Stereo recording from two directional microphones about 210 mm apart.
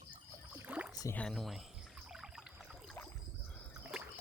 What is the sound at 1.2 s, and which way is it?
Pour, centre (ahead or behind).